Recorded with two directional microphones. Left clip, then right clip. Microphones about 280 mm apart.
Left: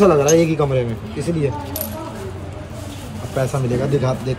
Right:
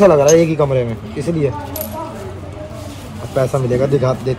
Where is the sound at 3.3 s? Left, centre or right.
Right.